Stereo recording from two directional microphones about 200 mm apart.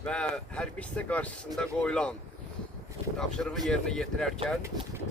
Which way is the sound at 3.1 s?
5° left (ahead or behind).